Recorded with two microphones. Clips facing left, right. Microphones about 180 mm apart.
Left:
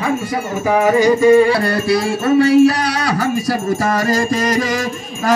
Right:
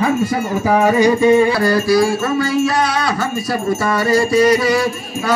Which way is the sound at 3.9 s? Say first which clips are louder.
Right 3 dB; 40° left (ahead or behind).